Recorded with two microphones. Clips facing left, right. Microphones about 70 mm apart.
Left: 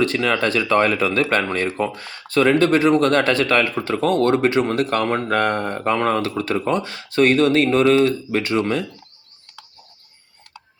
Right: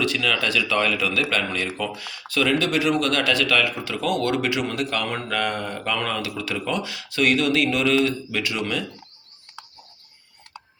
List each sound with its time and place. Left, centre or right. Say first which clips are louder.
0.0 s speech: left 5 dB; left
10.5 s tick-tock: right 1 dB; right